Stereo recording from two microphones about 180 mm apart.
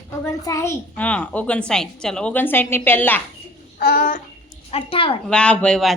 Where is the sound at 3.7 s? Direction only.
55° left (ahead or behind); by 5.2 s 30° left (ahead or behind).